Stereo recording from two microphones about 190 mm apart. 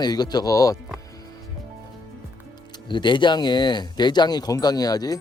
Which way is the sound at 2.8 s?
25° left (ahead or behind).